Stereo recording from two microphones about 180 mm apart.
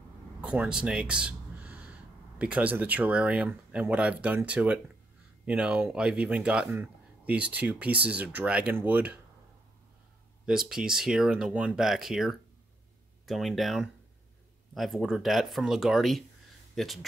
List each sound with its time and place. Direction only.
0.4 s gasp: 5° right (ahead or behind)
2.3 s speech: 5° right (ahead or behind)
10.4 s speech: 5° right (ahead or behind)